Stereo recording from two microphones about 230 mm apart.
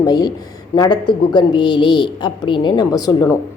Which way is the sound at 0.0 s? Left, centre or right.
Centre.